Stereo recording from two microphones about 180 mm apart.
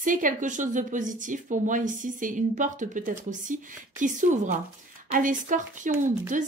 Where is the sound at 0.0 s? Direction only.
50° right (ahead or behind).